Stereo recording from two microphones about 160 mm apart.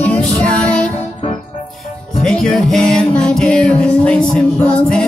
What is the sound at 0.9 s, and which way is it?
Music, 35° left (ahead or behind).